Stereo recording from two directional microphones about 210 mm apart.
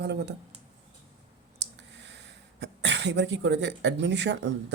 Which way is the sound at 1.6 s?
55° right (ahead or behind).